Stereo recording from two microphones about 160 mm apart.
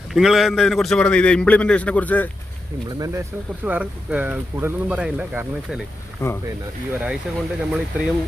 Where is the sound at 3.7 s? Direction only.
10° right (ahead or behind).